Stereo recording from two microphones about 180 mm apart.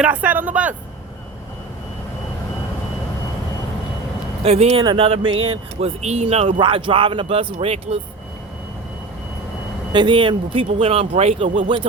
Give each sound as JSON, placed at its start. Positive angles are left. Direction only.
{"t": 0.0, "sound": "speech", "side_deg": -5}
{"t": 4.4, "sound": "speech", "side_deg": -35}
{"t": 9.9, "sound": "speech", "side_deg": -25}